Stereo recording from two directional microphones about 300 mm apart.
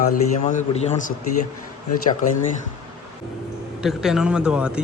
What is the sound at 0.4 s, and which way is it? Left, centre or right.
Speech, left.